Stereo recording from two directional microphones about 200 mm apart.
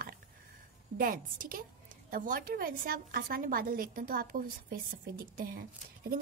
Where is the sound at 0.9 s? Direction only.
45° right (ahead or behind).